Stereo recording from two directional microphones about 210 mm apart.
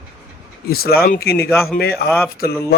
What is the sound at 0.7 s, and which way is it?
A man's voice, 45° left (ahead or behind).